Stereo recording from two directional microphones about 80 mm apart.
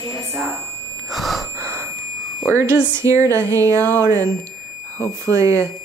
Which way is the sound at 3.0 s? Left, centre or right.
Right.